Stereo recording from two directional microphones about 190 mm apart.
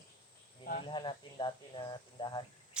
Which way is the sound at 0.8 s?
25° left (ahead or behind).